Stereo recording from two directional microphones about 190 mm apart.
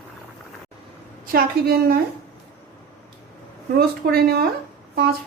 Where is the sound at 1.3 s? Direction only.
50° right (ahead or behind).